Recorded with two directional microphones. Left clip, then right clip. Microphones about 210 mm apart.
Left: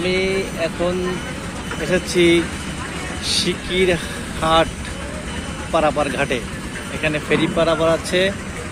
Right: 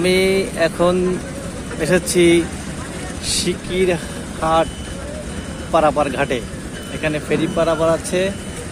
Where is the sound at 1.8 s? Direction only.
15° right (ahead or behind).